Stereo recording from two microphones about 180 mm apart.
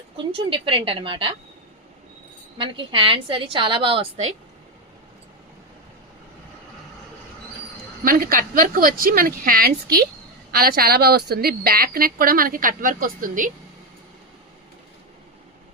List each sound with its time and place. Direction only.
0.3 s a woman's voice: 30° right (ahead or behind)
2.6 s a woman's voice: 30° right (ahead or behind)
8.0 s a woman's voice: 50° right (ahead or behind)